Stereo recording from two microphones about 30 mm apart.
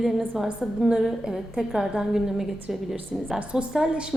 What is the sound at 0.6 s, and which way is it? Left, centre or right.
Speech, right.